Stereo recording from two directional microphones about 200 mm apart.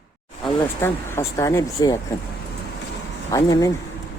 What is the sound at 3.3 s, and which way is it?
Speech, 15° left (ahead or behind).